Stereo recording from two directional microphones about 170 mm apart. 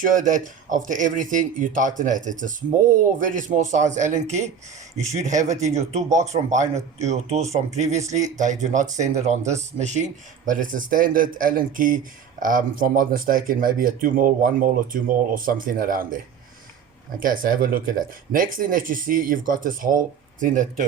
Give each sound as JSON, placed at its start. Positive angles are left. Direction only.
{"t": 0.0, "sound": "speech", "side_deg": -50}
{"t": 17.2, "sound": "speech", "side_deg": -55}